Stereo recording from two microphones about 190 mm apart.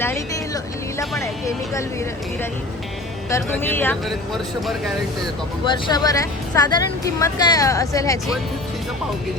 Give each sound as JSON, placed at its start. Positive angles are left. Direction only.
{"t": 0.0, "sound": "vehicle", "side_deg": 15}
{"t": 1.2, "sound": "speech", "side_deg": 15}
{"t": 3.2, "sound": "speech", "side_deg": 15}
{"t": 5.6, "sound": "speech", "side_deg": 20}